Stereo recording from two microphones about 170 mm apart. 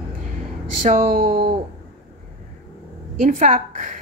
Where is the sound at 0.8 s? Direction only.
50° right (ahead or behind).